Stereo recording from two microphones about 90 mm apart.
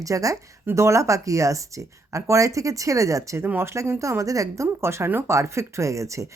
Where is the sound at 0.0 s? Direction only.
40° right (ahead or behind).